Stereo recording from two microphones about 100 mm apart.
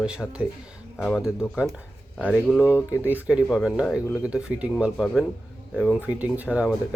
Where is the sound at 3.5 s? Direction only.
Centre (ahead or behind).